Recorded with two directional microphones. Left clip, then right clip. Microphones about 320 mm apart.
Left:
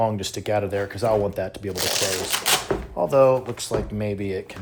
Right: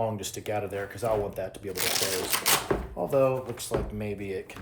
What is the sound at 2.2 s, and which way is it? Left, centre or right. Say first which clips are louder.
Typewriter: left 4 dB; centre.